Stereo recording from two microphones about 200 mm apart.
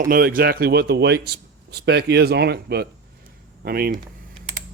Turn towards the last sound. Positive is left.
turn(degrees=-50)  # may be behind; listen again after turning